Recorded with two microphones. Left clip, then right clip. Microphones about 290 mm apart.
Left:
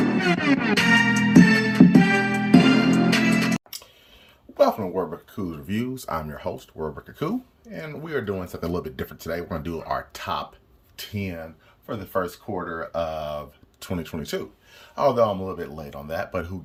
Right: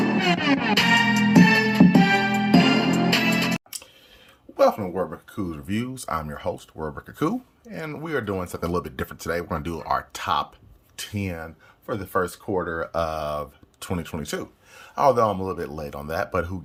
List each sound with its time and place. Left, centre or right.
0.0 s music: centre
5.3 s speech: centre